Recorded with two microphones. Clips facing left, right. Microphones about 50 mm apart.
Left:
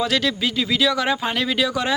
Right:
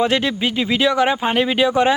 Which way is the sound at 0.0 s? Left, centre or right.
Right.